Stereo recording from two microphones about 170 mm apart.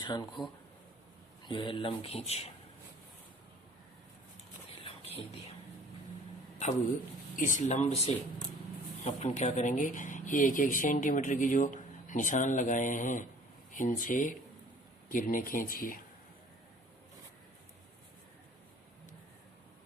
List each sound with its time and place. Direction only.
0.0 s speech: 25° left (ahead or behind)
1.5 s speech: 30° left (ahead or behind)
4.8 s a sound: 35° left (ahead or behind)
7.3 s speech: 50° left (ahead or behind)